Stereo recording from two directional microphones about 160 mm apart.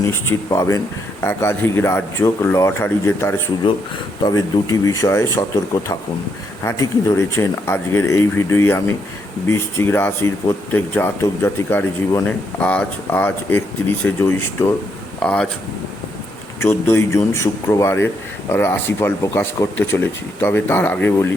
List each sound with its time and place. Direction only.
0.0 s a man's voice: 15° left (ahead or behind)
16.6 s a man's voice: 15° left (ahead or behind)